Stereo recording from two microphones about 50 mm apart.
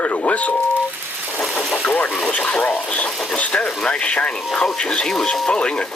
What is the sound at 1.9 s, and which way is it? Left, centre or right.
Speech, left.